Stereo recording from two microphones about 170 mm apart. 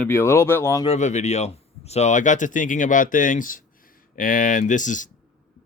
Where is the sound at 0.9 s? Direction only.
45° left (ahead or behind).